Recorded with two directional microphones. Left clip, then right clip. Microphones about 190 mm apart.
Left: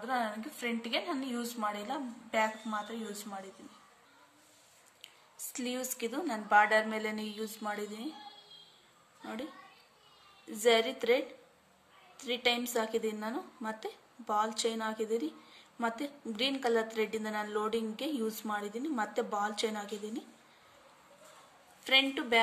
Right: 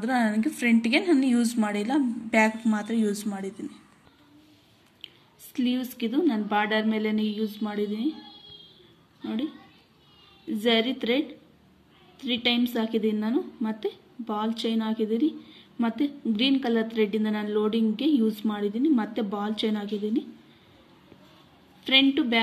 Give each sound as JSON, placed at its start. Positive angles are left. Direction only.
{"t": 0.0, "sound": "a woman's voice", "side_deg": -15}
{"t": 5.5, "sound": "a woman's voice", "side_deg": 10}
{"t": 9.2, "sound": "a woman's voice", "side_deg": 5}
{"t": 10.6, "sound": "a woman's voice", "side_deg": 10}
{"t": 21.8, "sound": "a woman's voice", "side_deg": 5}